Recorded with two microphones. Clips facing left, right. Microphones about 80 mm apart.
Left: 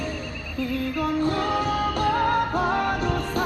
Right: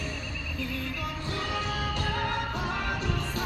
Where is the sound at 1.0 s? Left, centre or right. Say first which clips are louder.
Left 11 dB; left.